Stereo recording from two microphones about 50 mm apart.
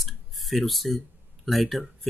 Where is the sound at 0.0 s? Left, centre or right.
Centre.